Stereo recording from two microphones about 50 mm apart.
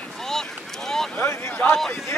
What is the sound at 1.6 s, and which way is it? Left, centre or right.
Speech, left.